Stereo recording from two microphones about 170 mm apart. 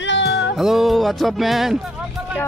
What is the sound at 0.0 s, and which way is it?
Music, 90° left.